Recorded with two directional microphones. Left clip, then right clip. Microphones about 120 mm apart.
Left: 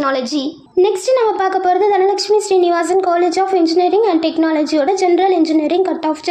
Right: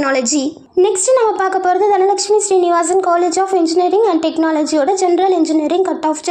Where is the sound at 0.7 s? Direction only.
15° right (ahead or behind).